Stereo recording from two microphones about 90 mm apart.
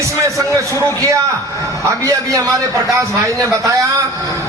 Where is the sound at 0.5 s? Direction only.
35° right (ahead or behind).